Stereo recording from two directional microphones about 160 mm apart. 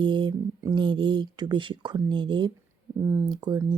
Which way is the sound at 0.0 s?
30° right (ahead or behind).